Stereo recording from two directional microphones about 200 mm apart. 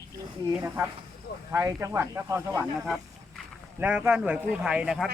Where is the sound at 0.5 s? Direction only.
10° right (ahead or behind).